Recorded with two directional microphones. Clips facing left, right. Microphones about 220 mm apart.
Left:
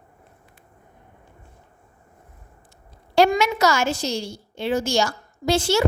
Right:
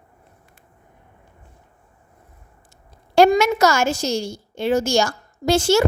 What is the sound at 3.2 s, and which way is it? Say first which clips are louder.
A woman's voice: right 4 dB; 45° right (ahead or behind).